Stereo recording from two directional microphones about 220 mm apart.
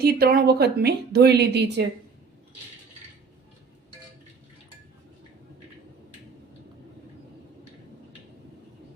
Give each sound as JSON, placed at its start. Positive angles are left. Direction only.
{"t": 0.0, "sound": "speech", "side_deg": -45}